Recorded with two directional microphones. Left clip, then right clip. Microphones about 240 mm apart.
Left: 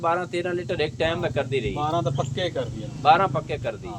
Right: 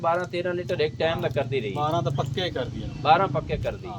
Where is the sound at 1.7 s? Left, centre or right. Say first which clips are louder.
Right 1 dB; right.